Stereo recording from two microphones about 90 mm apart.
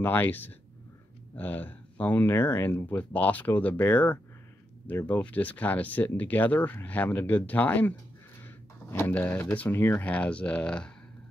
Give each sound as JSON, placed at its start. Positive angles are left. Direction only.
{"t": 0.0, "sound": "speech", "side_deg": 20}
{"t": 8.9, "sound": "speech", "side_deg": 25}